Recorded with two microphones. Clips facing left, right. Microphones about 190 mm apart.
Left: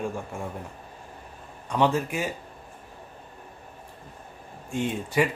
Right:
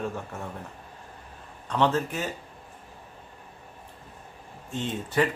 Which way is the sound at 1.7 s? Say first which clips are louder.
Left 1 dB; 10° left (ahead or behind).